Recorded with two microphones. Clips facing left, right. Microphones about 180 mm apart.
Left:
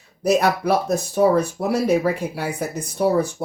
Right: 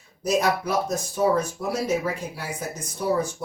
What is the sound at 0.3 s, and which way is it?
Speech, 65° left (ahead or behind).